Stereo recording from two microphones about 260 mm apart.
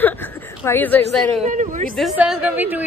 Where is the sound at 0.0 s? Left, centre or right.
Centre.